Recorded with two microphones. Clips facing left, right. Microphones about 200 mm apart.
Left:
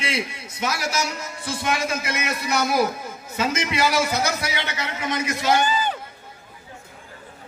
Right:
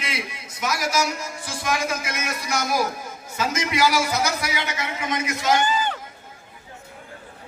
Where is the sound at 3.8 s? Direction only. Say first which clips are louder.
Even; 25° left (ahead or behind).